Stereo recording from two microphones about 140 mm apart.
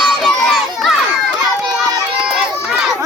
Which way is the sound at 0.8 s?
Centre (ahead or behind).